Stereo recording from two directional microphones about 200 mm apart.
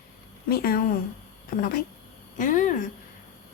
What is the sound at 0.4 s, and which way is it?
Speech, 50° left (ahead or behind).